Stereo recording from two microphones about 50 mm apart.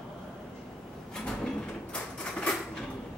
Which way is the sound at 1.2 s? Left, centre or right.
Centre.